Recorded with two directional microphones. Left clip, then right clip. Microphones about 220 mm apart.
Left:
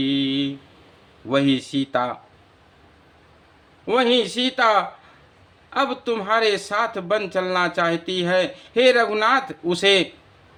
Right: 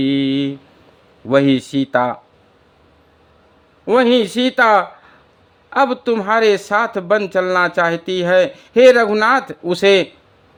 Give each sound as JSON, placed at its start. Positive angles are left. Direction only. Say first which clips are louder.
{"t": 0.0, "sound": "a sound", "louder": "right 5 dB", "side_deg": -35}
{"t": 1.3, "sound": "speech", "louder": "right 6 dB", "side_deg": -30}
{"t": 3.8, "sound": "speech", "louder": "right 5 dB", "side_deg": -30}